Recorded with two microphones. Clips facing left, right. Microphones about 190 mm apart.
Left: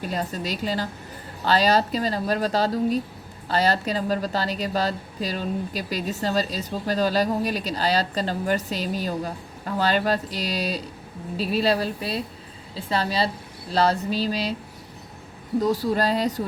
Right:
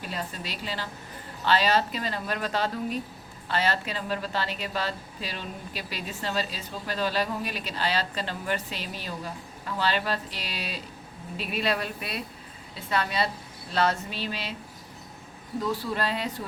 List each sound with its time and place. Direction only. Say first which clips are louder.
0.0 s speech: left 7 dB; 40° left (ahead or behind)
15.6 s speech: left 6 dB; 40° left (ahead or behind)